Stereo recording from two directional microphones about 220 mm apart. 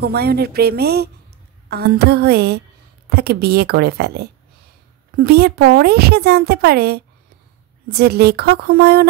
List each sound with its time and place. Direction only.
0.0 s a woman's voice: 45° right (ahead or behind)